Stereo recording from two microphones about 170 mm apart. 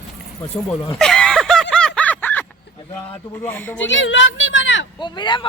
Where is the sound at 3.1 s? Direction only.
10° left (ahead or behind).